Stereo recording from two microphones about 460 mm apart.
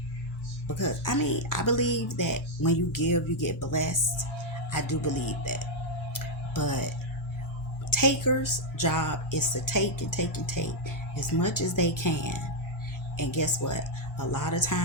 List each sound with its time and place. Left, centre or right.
0.7 s speech: left
6.1 s a sound: left
7.9 s speech: left